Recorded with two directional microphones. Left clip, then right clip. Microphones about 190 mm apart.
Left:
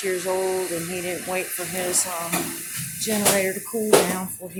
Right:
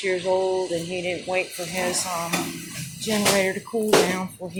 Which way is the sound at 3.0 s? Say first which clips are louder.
Right 1 dB; 5° left (ahead or behind).